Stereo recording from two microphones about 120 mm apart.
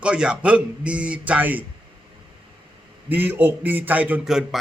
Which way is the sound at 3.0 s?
15° right (ahead or behind).